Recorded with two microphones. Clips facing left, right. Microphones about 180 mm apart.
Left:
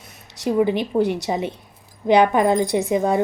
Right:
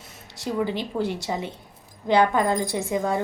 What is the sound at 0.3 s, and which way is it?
Speech, 15° left (ahead or behind).